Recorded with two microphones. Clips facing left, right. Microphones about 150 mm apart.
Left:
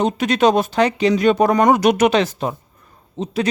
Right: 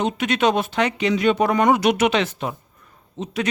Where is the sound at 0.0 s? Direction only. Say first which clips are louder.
Left 4 dB; 40° left (ahead or behind).